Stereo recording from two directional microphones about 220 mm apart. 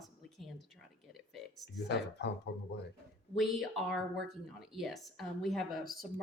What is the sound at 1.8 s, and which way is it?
Speech, 50° left (ahead or behind).